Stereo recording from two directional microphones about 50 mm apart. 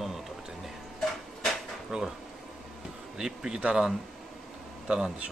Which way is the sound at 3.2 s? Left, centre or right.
Centre.